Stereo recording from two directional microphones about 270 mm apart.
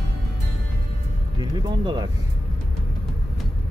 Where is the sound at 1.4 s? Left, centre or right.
Centre.